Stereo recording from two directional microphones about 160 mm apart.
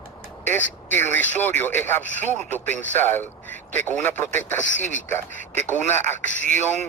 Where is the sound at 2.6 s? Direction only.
50° right (ahead or behind).